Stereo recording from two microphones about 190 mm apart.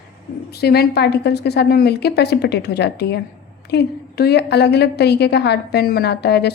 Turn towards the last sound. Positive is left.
turn(degrees=60)  # may be behind; listen again after turning